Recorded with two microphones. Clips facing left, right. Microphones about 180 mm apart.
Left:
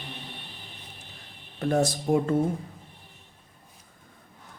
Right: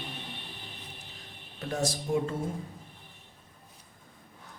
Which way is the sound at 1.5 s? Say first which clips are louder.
Left 7 dB; 55° left (ahead or behind).